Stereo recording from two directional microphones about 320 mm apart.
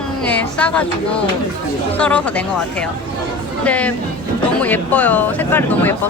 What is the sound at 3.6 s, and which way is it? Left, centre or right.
Speech, centre.